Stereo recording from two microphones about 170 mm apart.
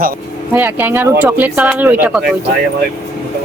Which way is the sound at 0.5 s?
10° right (ahead or behind).